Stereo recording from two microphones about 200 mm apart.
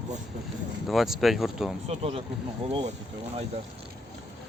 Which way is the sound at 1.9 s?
30° right (ahead or behind).